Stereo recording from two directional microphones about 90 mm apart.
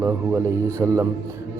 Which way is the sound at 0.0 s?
30° right (ahead or behind).